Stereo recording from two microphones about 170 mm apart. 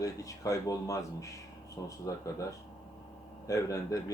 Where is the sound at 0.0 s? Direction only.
20° left (ahead or behind).